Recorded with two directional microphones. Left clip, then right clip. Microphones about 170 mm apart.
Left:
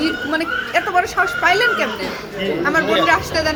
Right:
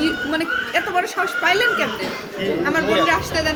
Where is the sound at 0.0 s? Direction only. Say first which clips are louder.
Left 1 dB; 20° right (ahead or behind).